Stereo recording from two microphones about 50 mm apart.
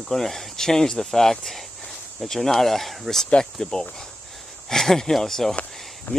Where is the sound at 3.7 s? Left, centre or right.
Centre.